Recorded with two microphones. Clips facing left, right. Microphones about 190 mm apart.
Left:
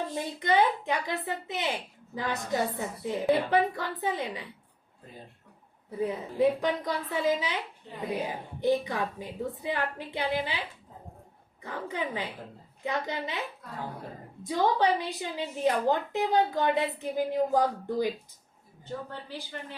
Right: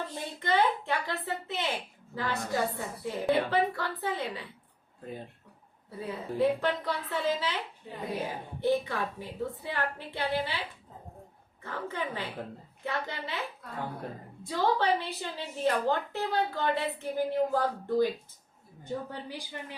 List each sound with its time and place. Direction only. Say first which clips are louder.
0.1 s speech: left 3 dB; 15° left (ahead or behind)
6.0 s speech: left 3 dB; 15° left (ahead or behind)
7.9 s a woman's voice: right 1 dB; 10° right (ahead or behind)
8.6 s speech: left 1 dB; 15° left (ahead or behind)
11.6 s speech: left 2 dB; 15° left (ahead or behind)
14.4 s speech: left 2 dB; 15° left (ahead or behind)
19.3 s a woman's voice: left 1 dB; 15° right (ahead or behind)